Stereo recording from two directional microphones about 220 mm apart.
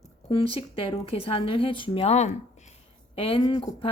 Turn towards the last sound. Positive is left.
turn(degrees=20)  # may be behind; listen again after turning